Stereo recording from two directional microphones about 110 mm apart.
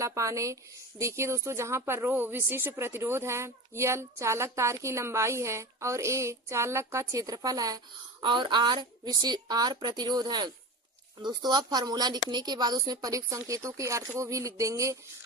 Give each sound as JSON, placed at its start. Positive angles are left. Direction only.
{"t": 0.0, "sound": "speech", "side_deg": -30}
{"t": 8.2, "sound": "a woman's voice", "side_deg": -45}